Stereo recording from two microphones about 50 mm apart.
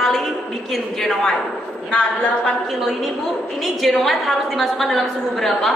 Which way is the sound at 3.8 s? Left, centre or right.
Centre.